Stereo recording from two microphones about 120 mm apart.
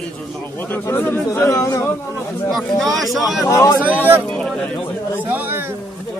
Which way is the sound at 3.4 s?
25° left (ahead or behind).